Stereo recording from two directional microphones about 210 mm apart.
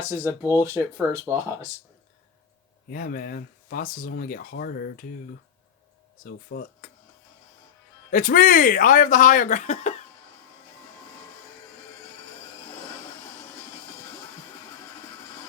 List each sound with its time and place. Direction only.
0.1 s speech: 10° right (ahead or behind)
2.9 s speech: 45° left (ahead or behind)
6.2 s speech: 45° left (ahead or behind)
8.1 s speech: 40° left (ahead or behind)